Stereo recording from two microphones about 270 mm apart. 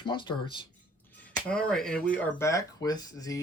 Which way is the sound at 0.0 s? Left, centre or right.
Centre.